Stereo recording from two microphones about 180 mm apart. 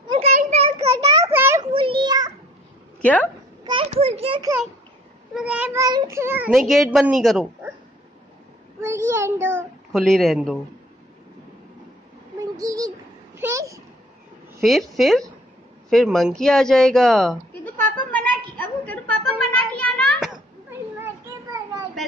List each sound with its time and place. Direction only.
0.1 s a sound: 35° right (ahead or behind)
1.2 s a sound: 15° right (ahead or behind)
1.7 s child singing: 30° right (ahead or behind)
3.0 s speech: 10° left (ahead or behind)
3.6 s children playing: 30° right (ahead or behind)
5.3 s child singing: 5° right (ahead or behind)
6.7 s speech: centre (ahead or behind)
8.8 s a child's voice: 15° right (ahead or behind)
9.9 s speech: centre (ahead or behind)
12.4 s a sound: 20° right (ahead or behind)
14.6 s speech: centre (ahead or behind)
18.6 s a sound: 10° left (ahead or behind)